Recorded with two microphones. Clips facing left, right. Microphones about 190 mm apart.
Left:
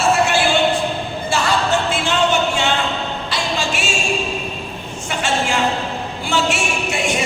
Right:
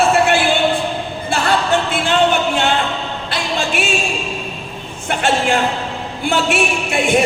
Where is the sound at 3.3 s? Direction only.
55° right (ahead or behind).